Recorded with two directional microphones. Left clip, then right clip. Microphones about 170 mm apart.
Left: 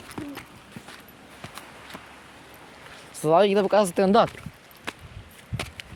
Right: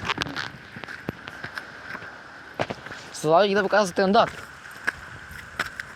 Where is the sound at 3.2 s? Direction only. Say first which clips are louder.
Even; 15° left (ahead or behind); by 4.3 s 35° left (ahead or behind).